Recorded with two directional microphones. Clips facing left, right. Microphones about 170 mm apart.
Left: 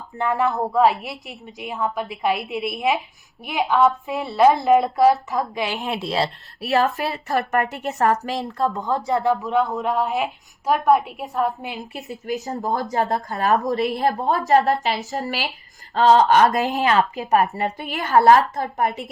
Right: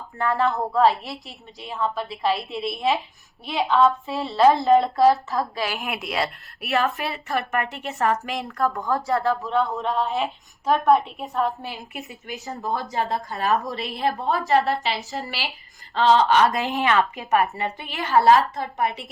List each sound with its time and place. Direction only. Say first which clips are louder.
0.2 s speech: left 1 dB; 15° left (ahead or behind)
3.4 s a woman's voice: left 1 dB; 15° left (ahead or behind); by 8.4 s 40° left (ahead or behind)
8.4 s a woman's voice: left 2 dB; 25° left (ahead or behind); by 11.5 s centre (ahead or behind)
12.0 s speech: left 7 dB; 40° left (ahead or behind)